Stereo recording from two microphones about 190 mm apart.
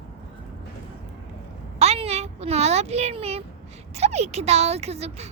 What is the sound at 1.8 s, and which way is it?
A child's voice, 35° right (ahead or behind).